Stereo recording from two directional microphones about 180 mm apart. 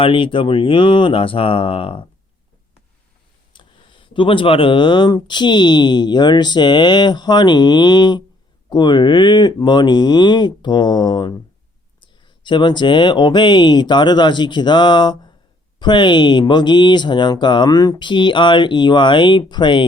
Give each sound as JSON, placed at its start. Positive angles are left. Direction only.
{"t": 0.0, "sound": "speech", "side_deg": 30}
{"t": 3.5, "sound": "speech", "side_deg": 25}